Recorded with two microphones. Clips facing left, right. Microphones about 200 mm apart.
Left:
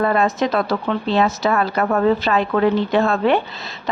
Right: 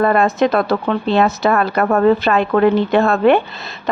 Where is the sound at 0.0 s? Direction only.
55° right (ahead or behind).